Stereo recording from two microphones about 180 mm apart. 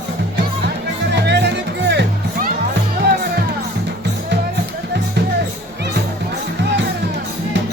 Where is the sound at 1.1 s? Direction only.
75° right (ahead or behind).